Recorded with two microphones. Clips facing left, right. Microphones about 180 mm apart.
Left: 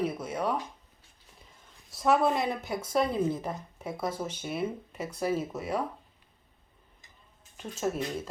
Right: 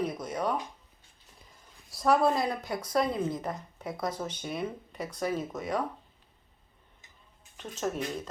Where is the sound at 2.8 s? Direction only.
25° left (ahead or behind).